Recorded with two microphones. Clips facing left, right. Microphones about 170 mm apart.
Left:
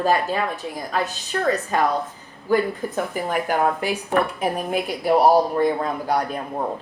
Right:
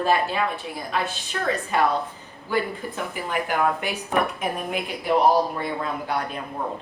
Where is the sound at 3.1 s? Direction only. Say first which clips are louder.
Left 1 dB; 40° left (ahead or behind).